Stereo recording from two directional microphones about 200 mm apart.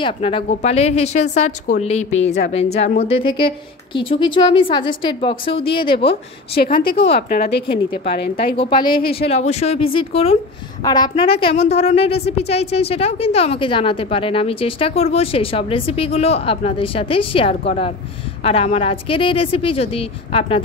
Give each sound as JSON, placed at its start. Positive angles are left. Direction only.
{"t": 0.0, "sound": "a woman's voice", "side_deg": 25}
{"t": 6.0, "sound": "a woman's voice", "side_deg": 50}
{"t": 8.5, "sound": "a woman's voice", "side_deg": 25}